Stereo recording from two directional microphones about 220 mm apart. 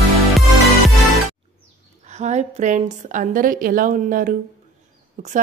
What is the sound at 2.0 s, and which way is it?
A woman's voice, 30° right (ahead or behind).